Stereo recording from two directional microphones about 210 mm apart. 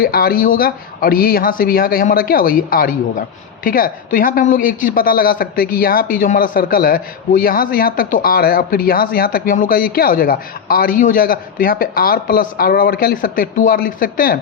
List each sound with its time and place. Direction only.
0.0 s a man's voice: 45° left (ahead or behind)